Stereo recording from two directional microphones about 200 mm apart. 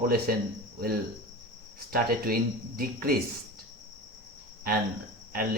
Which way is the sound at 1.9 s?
45° right (ahead or behind).